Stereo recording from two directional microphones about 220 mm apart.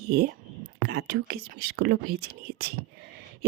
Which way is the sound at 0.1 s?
45° right (ahead or behind).